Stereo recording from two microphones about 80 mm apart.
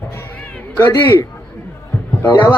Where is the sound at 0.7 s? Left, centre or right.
Left.